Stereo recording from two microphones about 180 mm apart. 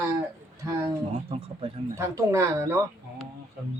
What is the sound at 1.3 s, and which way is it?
Speech, 30° right (ahead or behind).